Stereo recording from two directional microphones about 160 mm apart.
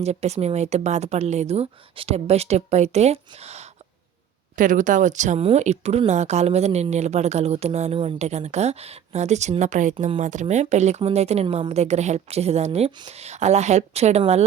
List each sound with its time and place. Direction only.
0.0 s speech: 45° right (ahead or behind)
4.5 s speech: 55° right (ahead or behind)